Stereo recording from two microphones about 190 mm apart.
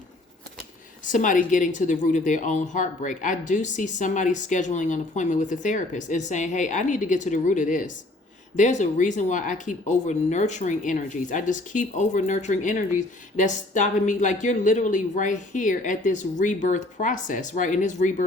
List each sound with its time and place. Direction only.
1.1 s speech: 45° left (ahead or behind)